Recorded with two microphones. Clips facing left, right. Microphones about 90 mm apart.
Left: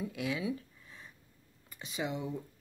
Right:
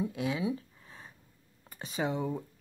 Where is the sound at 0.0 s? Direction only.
30° right (ahead or behind).